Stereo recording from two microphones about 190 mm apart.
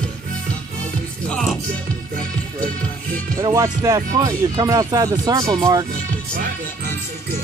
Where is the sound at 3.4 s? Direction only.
15° right (ahead or behind).